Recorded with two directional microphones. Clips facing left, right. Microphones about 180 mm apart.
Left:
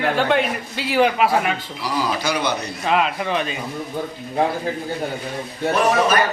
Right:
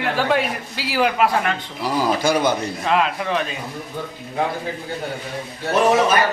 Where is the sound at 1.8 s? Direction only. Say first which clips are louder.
Right 4 dB; 50° right (ahead or behind).